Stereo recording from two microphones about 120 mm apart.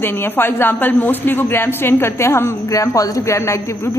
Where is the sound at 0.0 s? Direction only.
20° left (ahead or behind).